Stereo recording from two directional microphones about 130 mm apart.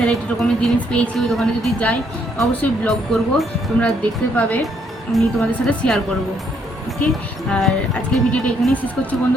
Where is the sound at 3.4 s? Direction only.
10° left (ahead or behind).